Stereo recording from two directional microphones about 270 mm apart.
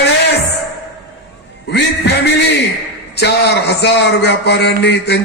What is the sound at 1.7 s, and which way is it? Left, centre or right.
Music, left.